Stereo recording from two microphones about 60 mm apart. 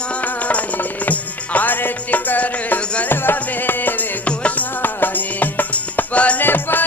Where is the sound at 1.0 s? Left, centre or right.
Left.